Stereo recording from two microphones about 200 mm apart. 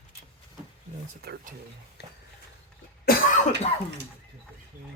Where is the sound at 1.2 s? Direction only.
55° right (ahead or behind).